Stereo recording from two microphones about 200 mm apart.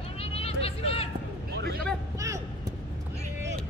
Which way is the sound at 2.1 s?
15° right (ahead or behind).